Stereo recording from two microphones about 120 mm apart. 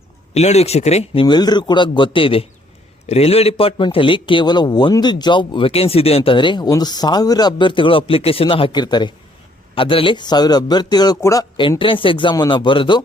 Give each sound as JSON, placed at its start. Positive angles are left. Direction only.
{"t": 0.3, "sound": "speech", "side_deg": 65}
{"t": 1.2, "sound": "a man's voice", "side_deg": 35}
{"t": 11.8, "sound": "a man's voice", "side_deg": 45}